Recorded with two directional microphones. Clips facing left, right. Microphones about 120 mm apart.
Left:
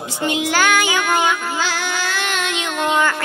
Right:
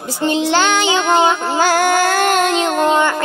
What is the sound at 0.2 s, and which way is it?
Child singing, 30° right (ahead or behind).